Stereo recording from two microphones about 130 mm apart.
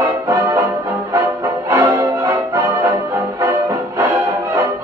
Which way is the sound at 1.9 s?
25° right (ahead or behind).